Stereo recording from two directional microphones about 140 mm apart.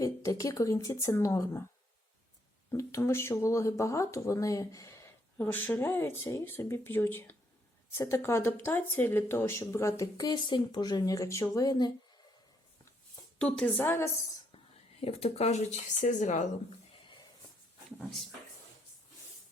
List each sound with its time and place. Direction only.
0.0 s speech: 25° left (ahead or behind)
2.6 s speech: 20° left (ahead or behind)
13.4 s speech: 5° left (ahead or behind)
13.8 s speech: 20° left (ahead or behind)
15.0 s speech: 45° left (ahead or behind)